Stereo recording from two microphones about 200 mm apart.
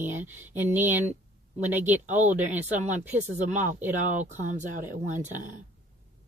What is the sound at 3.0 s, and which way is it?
Speech, 10° right (ahead or behind).